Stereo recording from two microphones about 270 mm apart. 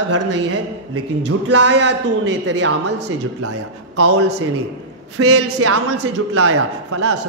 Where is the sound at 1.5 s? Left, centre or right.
Right.